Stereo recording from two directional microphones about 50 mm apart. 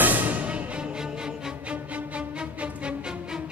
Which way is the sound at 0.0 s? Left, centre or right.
Right.